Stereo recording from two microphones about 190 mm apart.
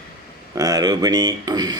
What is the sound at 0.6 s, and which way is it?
Speech, 20° right (ahead or behind).